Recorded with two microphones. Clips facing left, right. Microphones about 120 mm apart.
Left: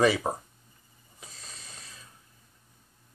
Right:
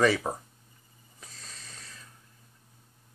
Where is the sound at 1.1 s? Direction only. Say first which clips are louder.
Left 1 dB; 15° left (ahead or behind).